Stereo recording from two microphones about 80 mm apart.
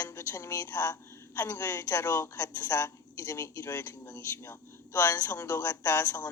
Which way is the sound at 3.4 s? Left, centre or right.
Left.